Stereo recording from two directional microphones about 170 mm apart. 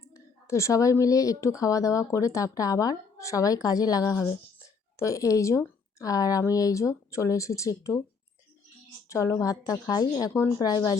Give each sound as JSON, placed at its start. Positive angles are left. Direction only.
{"t": 0.4, "sound": "speech", "side_deg": 15}
{"t": 9.0, "sound": "speech", "side_deg": 20}